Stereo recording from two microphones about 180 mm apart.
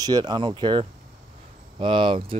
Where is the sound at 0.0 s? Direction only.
20° right (ahead or behind).